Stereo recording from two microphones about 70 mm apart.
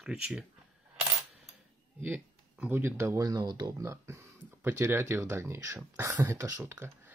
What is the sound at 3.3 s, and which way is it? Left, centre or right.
Speech, right.